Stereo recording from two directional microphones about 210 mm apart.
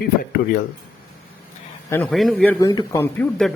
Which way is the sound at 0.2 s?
45° left (ahead or behind).